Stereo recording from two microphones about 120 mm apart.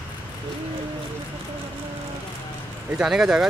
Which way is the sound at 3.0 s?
5° right (ahead or behind).